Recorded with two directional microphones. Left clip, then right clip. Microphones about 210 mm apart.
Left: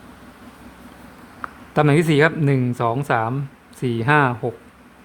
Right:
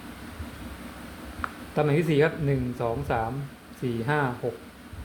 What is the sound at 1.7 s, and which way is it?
Speech, 35° left (ahead or behind).